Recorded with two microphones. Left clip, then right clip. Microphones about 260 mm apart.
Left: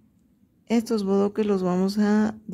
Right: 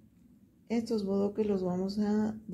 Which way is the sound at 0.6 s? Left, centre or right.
Left.